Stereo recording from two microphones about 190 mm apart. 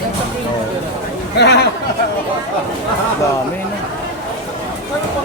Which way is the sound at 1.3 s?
60° left (ahead or behind).